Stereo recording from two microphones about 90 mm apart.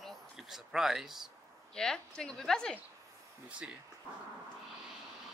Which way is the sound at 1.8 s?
5° left (ahead or behind).